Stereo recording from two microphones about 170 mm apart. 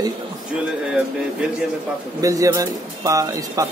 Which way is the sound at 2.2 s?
20° right (ahead or behind).